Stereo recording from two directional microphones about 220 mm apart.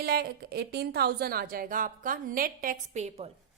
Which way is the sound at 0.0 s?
45° right (ahead or behind).